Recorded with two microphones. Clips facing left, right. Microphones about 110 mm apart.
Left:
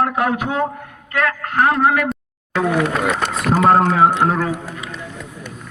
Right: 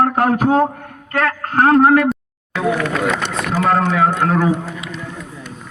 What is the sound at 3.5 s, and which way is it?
Speech, 30° left (ahead or behind).